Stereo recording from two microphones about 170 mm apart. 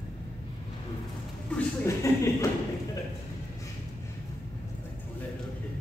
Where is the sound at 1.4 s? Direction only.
10° left (ahead or behind).